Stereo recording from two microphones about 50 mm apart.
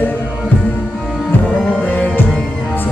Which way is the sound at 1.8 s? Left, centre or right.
Left.